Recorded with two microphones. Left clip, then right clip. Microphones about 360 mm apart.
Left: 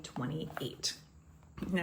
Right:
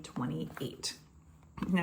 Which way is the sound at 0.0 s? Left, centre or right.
Centre.